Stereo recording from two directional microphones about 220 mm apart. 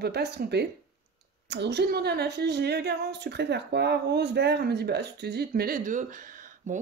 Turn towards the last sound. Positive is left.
turn(degrees=-35)  # may be behind; listen again after turning